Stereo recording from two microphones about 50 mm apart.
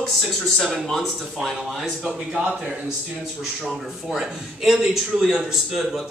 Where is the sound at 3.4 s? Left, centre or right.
Centre.